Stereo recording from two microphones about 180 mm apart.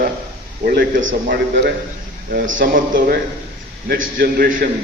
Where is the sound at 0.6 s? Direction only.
60° right (ahead or behind).